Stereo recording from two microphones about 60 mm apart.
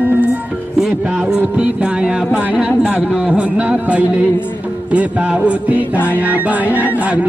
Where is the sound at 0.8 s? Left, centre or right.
Centre.